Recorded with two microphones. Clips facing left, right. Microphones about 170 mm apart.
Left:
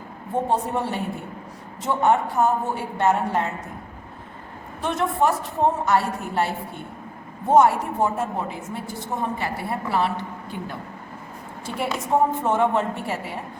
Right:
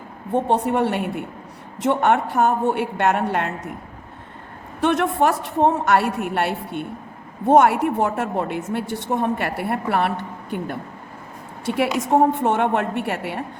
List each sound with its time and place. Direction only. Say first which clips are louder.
0.4 s a woman's voice: right 5 dB; 65° right (ahead or behind)
4.8 s a woman's voice: right 4 dB; 70° right (ahead or behind)
11.7 s a woman's voice: right 4 dB; 70° right (ahead or behind)